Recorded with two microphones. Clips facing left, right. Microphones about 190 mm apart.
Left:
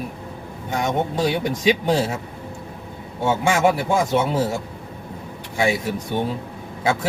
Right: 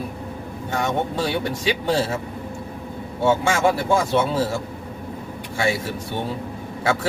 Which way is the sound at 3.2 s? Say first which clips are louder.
Even; 15° left (ahead or behind).